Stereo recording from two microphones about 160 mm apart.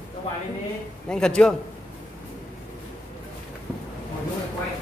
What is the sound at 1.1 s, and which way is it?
Speech, 5° left (ahead or behind).